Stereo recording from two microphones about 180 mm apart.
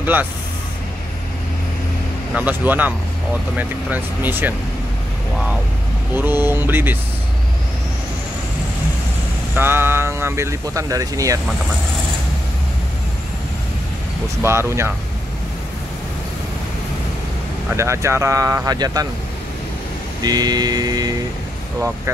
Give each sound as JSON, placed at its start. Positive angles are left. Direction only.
{"t": 0.0, "sound": "speech", "side_deg": -10}
{"t": 2.3, "sound": "speech", "side_deg": -10}
{"t": 6.1, "sound": "speech", "side_deg": -10}
{"t": 9.6, "sound": "speech", "side_deg": -10}
{"t": 14.4, "sound": "speech", "side_deg": -15}
{"t": 17.6, "sound": "speech", "side_deg": -15}
{"t": 20.2, "sound": "vehicle", "side_deg": -20}